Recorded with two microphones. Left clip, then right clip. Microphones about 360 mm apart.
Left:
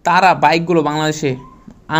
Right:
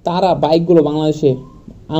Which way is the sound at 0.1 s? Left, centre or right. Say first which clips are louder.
Left 3 dB; left.